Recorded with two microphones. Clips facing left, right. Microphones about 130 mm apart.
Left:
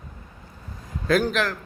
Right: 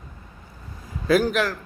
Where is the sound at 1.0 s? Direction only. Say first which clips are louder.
Right 2 dB; 5° right (ahead or behind).